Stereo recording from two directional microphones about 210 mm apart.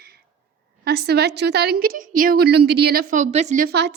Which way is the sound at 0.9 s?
50° right (ahead or behind).